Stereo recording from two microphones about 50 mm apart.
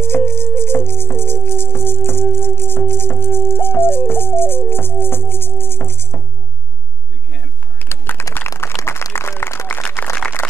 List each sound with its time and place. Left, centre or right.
0.0 s music: left
7.9 s typing: left
8.5 s applause: left